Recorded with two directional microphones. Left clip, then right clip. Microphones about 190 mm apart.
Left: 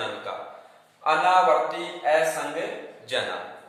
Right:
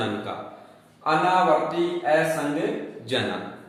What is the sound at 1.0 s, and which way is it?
A man's voice, centre (ahead or behind).